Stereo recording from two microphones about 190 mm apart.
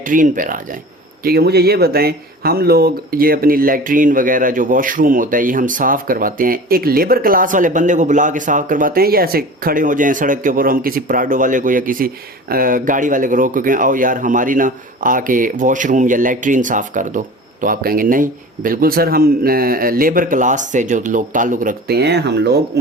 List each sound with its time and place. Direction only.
0.0 s speech: 45° right (ahead or behind)
1.2 s speech: 55° right (ahead or behind)